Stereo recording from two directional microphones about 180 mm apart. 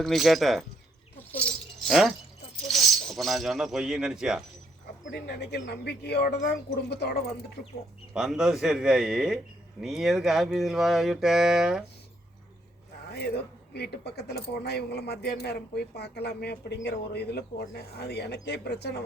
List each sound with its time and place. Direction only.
0.0 s speech: centre (ahead or behind)
1.3 s keys jangling: 5° left (ahead or behind)
2.6 s speech: centre (ahead or behind)
5.1 s speech: 65° left (ahead or behind)
8.1 s speech: 5° right (ahead or behind)
13.1 s speech: 65° left (ahead or behind)